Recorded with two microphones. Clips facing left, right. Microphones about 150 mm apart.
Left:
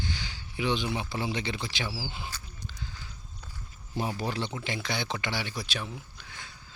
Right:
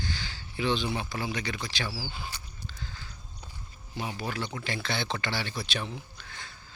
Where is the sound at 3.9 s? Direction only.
40° left (ahead or behind).